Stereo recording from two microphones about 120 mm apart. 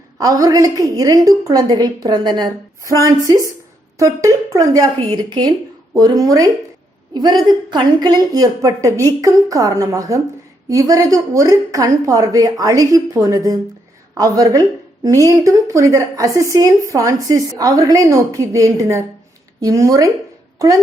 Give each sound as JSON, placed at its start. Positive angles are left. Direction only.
{"t": 0.2, "sound": "a woman's voice", "side_deg": -30}